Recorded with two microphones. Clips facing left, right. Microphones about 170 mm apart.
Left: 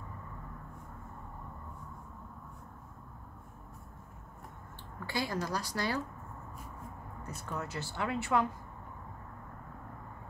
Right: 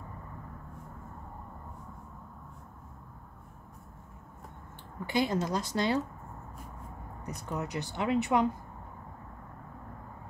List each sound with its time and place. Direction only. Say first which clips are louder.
5.0 s speech: right 6 dB; 20° right (ahead or behind)
7.2 s speech: right 4 dB; 20° right (ahead or behind)